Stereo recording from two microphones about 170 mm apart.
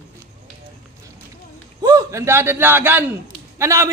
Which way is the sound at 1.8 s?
20° right (ahead or behind).